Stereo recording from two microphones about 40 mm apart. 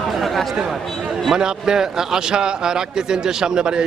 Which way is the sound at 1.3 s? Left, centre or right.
Centre.